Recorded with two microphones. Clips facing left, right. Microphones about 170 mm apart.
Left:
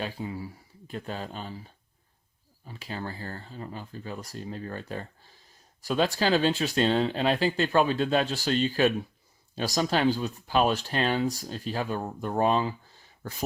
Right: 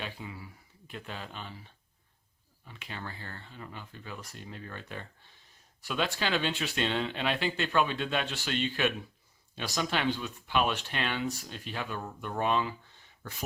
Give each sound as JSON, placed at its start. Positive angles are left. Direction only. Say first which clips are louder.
{"t": 0.0, "sound": "speech", "louder": "left 7 dB", "side_deg": 35}